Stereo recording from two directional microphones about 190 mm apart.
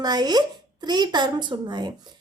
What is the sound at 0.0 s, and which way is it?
A woman's voice, 20° right (ahead or behind).